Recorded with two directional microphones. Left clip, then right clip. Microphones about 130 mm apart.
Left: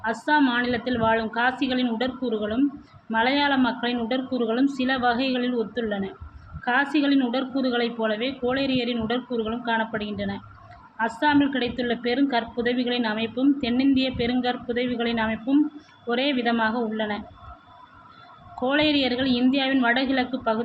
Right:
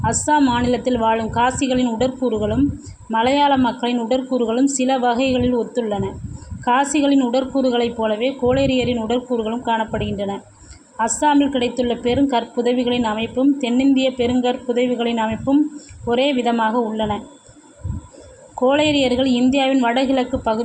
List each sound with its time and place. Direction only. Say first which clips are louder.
0.0 s a woman's voice: right 5 dB; 35° right (ahead or behind)
18.6 s a woman's voice: right 6 dB; 30° right (ahead or behind)